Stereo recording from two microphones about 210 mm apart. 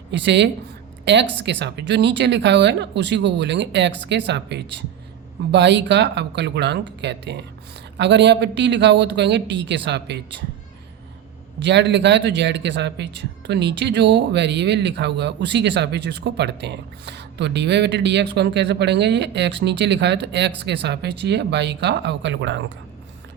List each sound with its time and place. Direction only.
0.1 s speech: 55° right (ahead or behind)
11.6 s speech: 55° right (ahead or behind)